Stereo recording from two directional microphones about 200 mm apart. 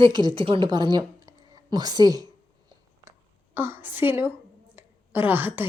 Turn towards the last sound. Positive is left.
turn(degrees=-10)  # may be behind; listen again after turning